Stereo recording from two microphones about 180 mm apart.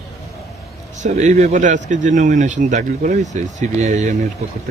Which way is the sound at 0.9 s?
40° right (ahead or behind).